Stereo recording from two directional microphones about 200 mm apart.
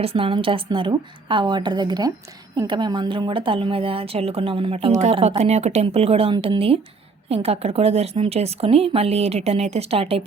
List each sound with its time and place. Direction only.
0.0 s speech: 30° right (ahead or behind)